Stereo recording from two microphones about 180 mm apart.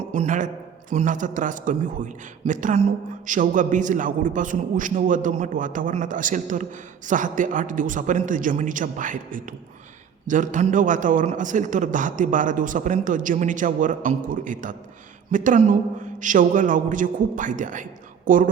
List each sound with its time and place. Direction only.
0.1 s a man's voice: 45° right (ahead or behind)